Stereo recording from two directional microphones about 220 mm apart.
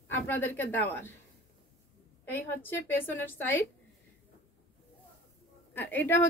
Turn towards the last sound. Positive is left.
turn(degrees=10)  # may be behind; listen again after turning